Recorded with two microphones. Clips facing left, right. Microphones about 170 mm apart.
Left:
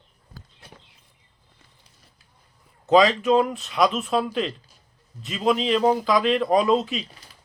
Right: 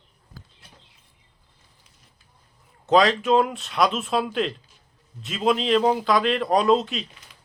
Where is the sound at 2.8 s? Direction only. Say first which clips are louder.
Left 1 dB; centre (ahead or behind).